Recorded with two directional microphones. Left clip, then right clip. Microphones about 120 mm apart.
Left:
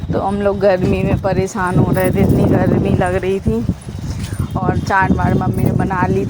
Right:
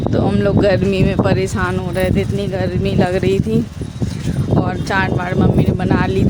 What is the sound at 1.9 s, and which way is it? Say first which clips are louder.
Speech: right 2 dB; 20° right (ahead or behind).